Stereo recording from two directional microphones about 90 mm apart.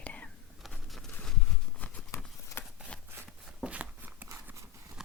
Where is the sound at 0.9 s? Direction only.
Centre (ahead or behind).